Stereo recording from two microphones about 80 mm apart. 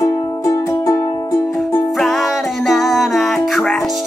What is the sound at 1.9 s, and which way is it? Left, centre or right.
Music, centre.